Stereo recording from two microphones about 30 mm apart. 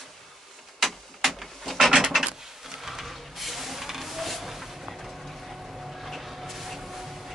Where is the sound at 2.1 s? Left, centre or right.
Centre.